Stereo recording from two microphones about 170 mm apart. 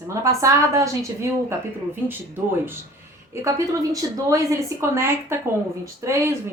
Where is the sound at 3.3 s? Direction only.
15° right (ahead or behind).